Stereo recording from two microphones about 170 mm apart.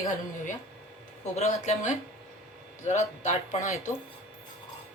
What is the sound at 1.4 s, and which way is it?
Speech, 45° left (ahead or behind).